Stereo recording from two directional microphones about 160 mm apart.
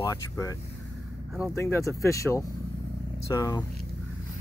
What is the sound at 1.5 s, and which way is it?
Speech, 15° left (ahead or behind).